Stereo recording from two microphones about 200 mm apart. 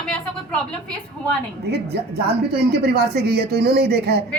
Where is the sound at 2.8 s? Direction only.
55° right (ahead or behind).